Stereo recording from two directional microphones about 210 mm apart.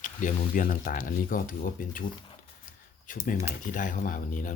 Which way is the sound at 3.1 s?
40° left (ahead or behind).